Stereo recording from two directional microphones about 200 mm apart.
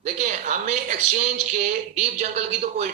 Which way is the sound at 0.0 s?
40° right (ahead or behind).